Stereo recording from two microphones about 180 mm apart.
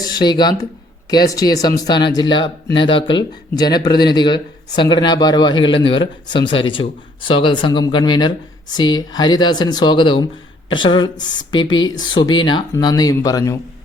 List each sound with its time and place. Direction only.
0.0 s speech: 20° left (ahead or behind)